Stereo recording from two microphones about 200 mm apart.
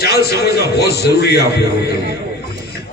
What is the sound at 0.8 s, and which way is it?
Speech, 55° left (ahead or behind).